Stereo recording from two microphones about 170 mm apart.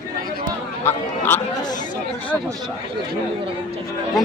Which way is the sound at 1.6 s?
25° left (ahead or behind).